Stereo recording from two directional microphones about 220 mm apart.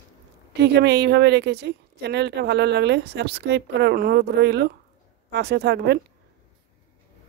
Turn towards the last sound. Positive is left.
turn(degrees=-50)  # may be behind; listen again after turning